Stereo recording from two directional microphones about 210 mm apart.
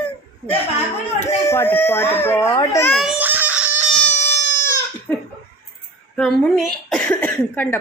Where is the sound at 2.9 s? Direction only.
Centre (ahead or behind).